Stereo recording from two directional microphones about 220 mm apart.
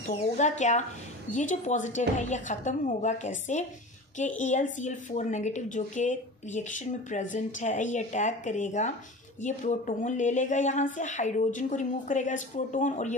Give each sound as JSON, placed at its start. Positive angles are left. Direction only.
{"t": 0.0, "sound": "speech", "side_deg": 35}